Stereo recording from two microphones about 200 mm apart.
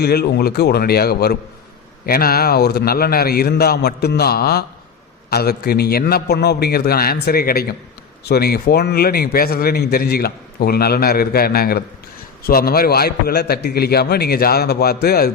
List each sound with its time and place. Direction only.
0.0 s a man's voice: 50° left (ahead or behind)